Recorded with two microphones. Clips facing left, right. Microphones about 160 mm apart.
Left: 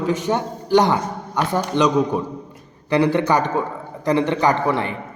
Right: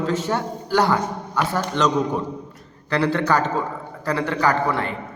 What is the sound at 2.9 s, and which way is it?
A man's voice, 15° left (ahead or behind).